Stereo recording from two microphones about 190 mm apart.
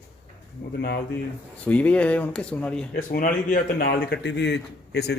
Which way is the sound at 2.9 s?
45° left (ahead or behind).